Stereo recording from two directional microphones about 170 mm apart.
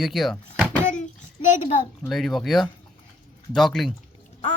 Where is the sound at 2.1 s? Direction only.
Centre (ahead or behind).